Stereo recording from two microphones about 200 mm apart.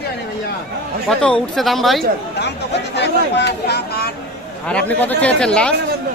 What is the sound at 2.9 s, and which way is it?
Speech, 60° left (ahead or behind).